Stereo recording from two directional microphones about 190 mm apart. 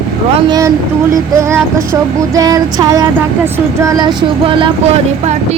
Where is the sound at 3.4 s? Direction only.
15° right (ahead or behind).